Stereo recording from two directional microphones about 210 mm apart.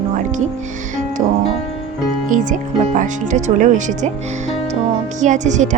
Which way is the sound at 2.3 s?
35° right (ahead or behind).